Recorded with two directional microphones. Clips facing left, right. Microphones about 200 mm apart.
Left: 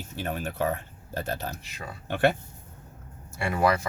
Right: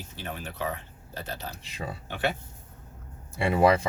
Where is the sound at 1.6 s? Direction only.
30° right (ahead or behind).